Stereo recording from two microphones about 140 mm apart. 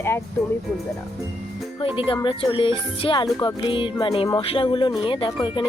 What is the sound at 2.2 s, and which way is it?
Speech, 35° left (ahead or behind).